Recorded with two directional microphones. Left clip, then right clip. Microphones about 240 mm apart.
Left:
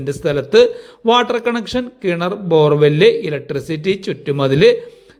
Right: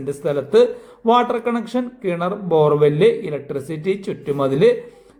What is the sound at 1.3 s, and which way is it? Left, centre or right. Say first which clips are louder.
A man's voice: left 3 dB; centre.